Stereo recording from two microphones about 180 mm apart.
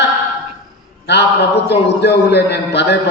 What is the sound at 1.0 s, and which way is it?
A man's voice, 70° left (ahead or behind).